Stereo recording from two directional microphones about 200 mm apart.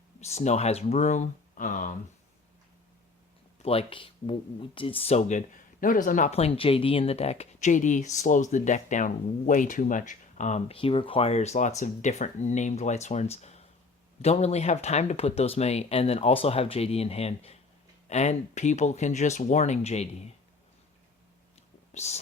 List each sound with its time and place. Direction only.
0.2 s speech: 35° left (ahead or behind)
3.6 s speech: 30° left (ahead or behind)
5.8 s speech: 45° left (ahead or behind)
21.9 s speech: 35° left (ahead or behind)